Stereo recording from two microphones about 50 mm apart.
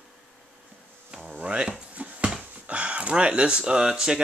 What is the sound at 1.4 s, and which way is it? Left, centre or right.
Speech, right.